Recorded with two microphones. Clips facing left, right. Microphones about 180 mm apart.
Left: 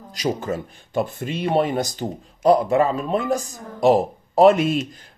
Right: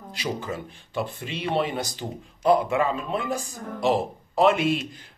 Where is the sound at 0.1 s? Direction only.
45° left (ahead or behind).